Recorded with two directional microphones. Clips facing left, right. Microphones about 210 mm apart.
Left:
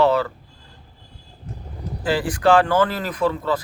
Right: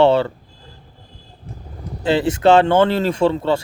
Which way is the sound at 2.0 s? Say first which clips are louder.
Right 4 dB; 25° right (ahead or behind).